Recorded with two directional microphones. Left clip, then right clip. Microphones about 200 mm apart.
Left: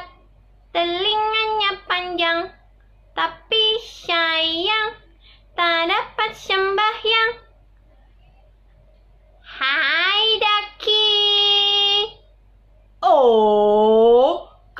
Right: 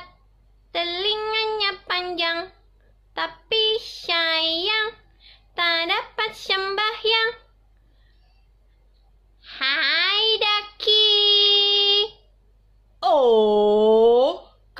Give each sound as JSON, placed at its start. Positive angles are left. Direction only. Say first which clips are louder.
{"t": 0.7, "sound": "child singing", "louder": "left 4 dB", "side_deg": -40}
{"t": 9.4, "sound": "child singing", "louder": "left 3 dB", "side_deg": -45}
{"t": 13.0, "sound": "wail", "louder": "left 3 dB", "side_deg": -40}